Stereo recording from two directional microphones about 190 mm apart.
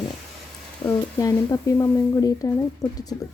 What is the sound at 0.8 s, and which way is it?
Speech, 20° left (ahead or behind).